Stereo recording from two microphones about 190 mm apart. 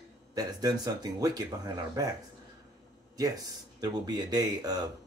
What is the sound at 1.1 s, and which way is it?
Speech, 20° right (ahead or behind).